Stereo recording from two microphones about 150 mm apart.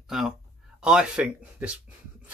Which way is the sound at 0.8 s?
5° right (ahead or behind).